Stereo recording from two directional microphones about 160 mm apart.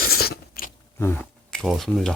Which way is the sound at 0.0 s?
75° left (ahead or behind).